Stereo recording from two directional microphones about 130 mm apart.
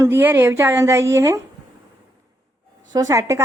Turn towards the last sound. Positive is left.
turn(degrees=-25)  # may be behind; listen again after turning